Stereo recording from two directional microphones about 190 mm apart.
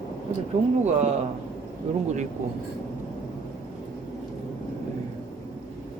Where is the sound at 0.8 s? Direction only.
35° right (ahead or behind).